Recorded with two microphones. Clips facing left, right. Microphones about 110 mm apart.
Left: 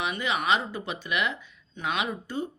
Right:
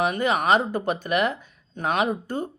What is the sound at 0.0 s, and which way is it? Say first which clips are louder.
Speech: right 6 dB; 45° right (ahead or behind).